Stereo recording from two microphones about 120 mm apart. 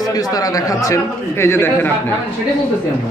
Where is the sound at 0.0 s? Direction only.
30° left (ahead or behind).